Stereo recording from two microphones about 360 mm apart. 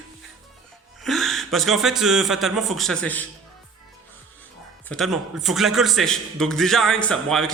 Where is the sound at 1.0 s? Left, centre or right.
Centre.